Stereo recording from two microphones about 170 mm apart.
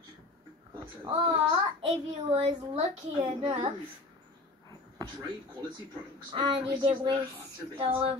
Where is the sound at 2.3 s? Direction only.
35° right (ahead or behind).